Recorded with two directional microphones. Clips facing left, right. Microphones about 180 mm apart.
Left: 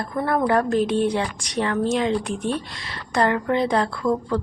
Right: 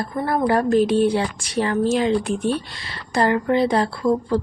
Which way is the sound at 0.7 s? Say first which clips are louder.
Right 3 dB; centre (ahead or behind).